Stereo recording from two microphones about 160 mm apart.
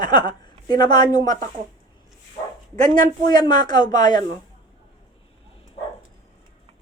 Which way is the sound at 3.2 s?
25° left (ahead or behind).